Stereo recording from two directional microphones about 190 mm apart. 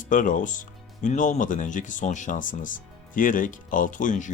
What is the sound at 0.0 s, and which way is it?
Speech, 45° left (ahead or behind).